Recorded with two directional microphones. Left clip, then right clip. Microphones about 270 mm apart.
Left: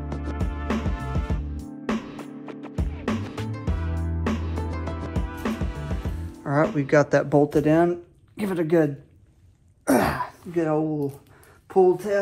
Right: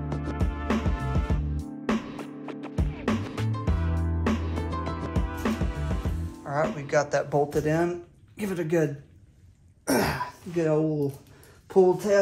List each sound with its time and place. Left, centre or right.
0.0 s music: centre
6.9 s speech: left; by 8.8 s centre
9.8 s throat clearing: centre
10.6 s speech: centre